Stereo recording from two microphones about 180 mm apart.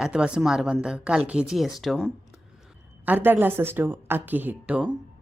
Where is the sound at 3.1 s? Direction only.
10° right (ahead or behind).